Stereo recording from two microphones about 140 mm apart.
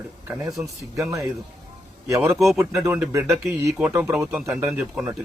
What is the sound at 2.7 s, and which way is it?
Speech, 20° right (ahead or behind).